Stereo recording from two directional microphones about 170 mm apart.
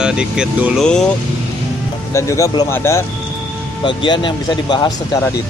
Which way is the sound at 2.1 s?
15° left (ahead or behind).